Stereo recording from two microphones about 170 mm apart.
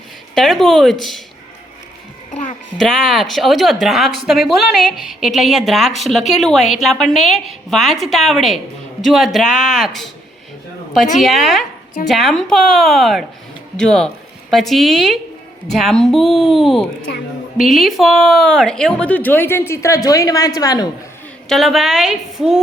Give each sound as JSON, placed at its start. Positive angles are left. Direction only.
{"t": 0.3, "sound": "a woman's voice", "side_deg": 0}
{"t": 2.3, "sound": "a sound", "side_deg": 45}
{"t": 2.7, "sound": "a woman's voice", "side_deg": 0}
{"t": 11.2, "sound": "a woman's voice", "side_deg": 0}
{"t": 21.5, "sound": "a woman's voice", "side_deg": 0}